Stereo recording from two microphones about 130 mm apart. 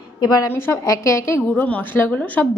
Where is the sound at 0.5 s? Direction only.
20° left (ahead or behind).